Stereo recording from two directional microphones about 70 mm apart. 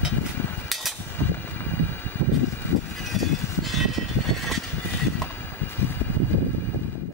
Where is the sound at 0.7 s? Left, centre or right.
Centre.